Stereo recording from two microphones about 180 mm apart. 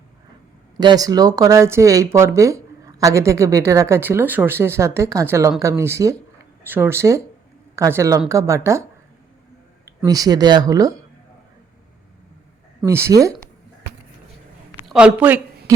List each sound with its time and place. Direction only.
0.8 s speech: 20° right (ahead or behind)
10.1 s speech: 20° right (ahead or behind)
12.8 s speech: 15° right (ahead or behind)
14.8 s speech: 5° right (ahead or behind)